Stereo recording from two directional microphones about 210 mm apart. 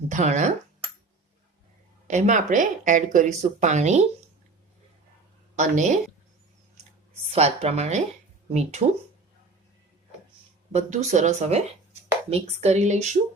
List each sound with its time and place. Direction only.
0.1 s a woman's voice: 35° right (ahead or behind)
2.0 s a woman's voice: 35° right (ahead or behind)
5.5 s a woman's voice: 35° right (ahead or behind)
7.3 s a woman's voice: 30° right (ahead or behind)
10.7 s a woman's voice: 35° right (ahead or behind)